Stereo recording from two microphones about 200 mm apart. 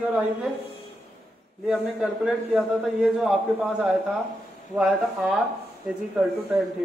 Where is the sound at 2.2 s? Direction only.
5° right (ahead or behind).